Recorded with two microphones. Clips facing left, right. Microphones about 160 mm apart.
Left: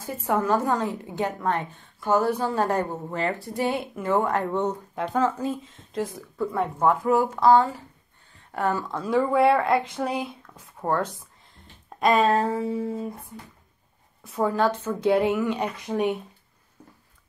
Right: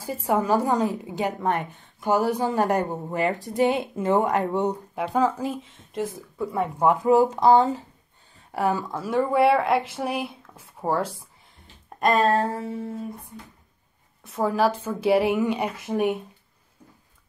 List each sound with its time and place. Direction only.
0.0 s a woman's voice: 10° right (ahead or behind)
5.9 s a woman's voice: centre (ahead or behind)
12.0 s a sound: centre (ahead or behind)
14.2 s a woman's voice: centre (ahead or behind)